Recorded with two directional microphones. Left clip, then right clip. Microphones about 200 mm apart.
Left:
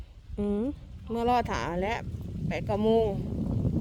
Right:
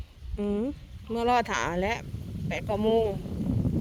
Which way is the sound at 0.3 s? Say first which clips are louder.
Right 1 dB; 10° left (ahead or behind).